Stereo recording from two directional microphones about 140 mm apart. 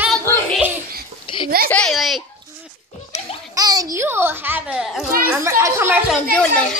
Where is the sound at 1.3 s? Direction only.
35° left (ahead or behind).